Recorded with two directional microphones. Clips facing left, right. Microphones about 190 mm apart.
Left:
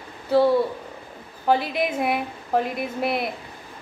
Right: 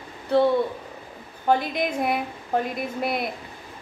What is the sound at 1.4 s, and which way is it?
A woman's voice, 5° left (ahead or behind).